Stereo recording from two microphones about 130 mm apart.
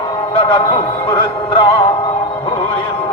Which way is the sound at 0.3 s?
40° left (ahead or behind).